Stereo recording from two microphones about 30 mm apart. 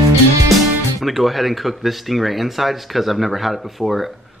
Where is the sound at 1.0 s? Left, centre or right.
Centre.